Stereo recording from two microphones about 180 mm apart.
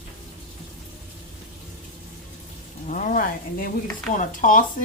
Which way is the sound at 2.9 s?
45° left (ahead or behind).